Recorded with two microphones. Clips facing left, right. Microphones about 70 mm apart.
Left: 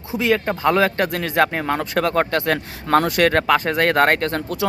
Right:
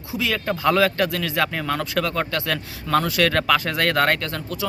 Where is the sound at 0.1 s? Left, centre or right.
Left.